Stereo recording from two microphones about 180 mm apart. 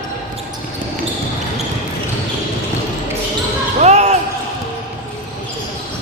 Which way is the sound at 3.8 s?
40° right (ahead or behind).